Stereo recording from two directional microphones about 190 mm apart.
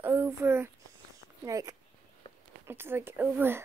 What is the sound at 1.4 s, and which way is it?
A woman's voice, 15° right (ahead or behind).